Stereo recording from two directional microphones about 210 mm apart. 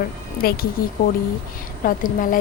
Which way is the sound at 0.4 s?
45° left (ahead or behind).